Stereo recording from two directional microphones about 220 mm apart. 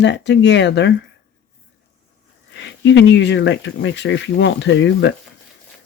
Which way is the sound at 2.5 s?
55° left (ahead or behind).